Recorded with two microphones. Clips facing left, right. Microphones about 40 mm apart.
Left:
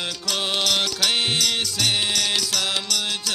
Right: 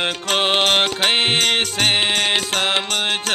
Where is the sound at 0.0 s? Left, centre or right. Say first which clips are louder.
Right 7 dB; right.